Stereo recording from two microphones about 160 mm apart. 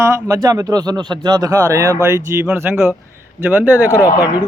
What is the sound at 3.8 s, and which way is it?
Speech, 20° left (ahead or behind).